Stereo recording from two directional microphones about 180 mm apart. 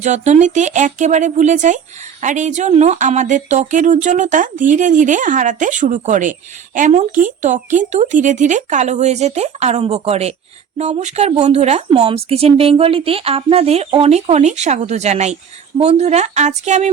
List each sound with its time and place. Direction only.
0.0 s speech: 40° right (ahead or behind)